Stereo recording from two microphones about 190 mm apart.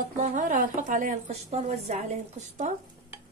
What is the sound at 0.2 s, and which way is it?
A woman's voice, 40° right (ahead or behind).